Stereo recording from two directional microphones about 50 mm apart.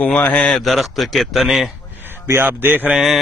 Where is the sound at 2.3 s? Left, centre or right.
Right.